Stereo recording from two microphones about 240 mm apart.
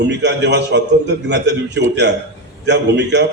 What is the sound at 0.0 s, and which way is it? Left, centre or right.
A man's voice, right.